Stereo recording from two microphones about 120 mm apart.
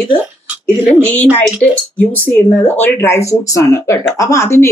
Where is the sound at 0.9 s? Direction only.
15° left (ahead or behind).